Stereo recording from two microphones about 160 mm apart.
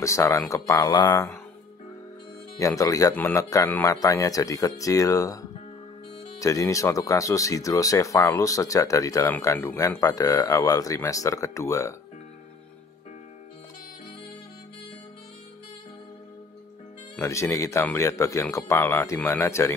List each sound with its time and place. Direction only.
0.0 s speech: 20° left (ahead or behind)
2.6 s speech: 20° left (ahead or behind)
17.2 s speech: 20° left (ahead or behind)